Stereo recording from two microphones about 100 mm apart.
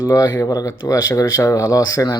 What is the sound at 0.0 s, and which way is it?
Speech, 35° left (ahead or behind).